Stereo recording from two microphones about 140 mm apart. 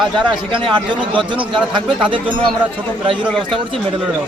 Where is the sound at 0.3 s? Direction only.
35° right (ahead or behind).